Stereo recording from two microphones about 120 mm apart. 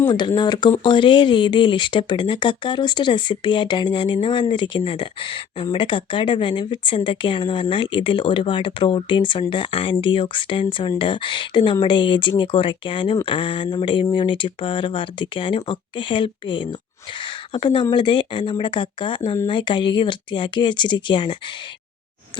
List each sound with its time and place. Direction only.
0.1 s speech: 35° left (ahead or behind)